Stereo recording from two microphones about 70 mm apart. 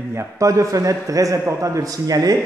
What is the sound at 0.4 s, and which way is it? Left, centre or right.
A man's voice, right.